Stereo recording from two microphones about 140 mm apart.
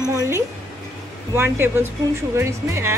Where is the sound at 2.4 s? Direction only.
20° right (ahead or behind).